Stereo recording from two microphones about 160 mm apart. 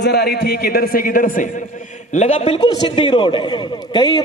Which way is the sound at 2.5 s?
25° left (ahead or behind).